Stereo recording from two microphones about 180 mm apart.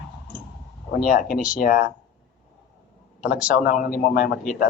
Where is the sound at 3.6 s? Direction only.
55° left (ahead or behind).